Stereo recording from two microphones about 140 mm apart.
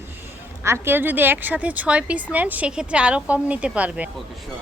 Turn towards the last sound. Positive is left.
turn(degrees=-10)  # may be behind; listen again after turning